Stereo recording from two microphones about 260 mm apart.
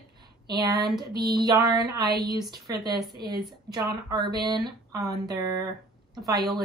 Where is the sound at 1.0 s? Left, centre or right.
Right.